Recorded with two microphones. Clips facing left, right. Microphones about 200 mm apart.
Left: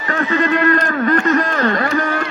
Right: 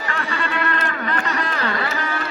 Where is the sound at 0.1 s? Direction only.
40° left (ahead or behind).